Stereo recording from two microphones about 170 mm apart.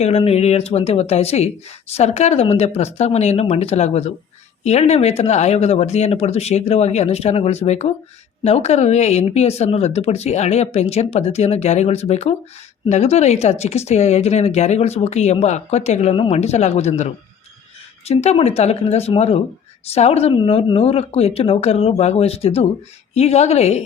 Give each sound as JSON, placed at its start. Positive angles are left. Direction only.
{"t": 0.0, "sound": "speech", "side_deg": 40}